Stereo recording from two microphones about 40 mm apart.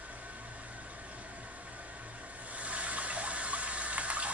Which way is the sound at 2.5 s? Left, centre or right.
Right.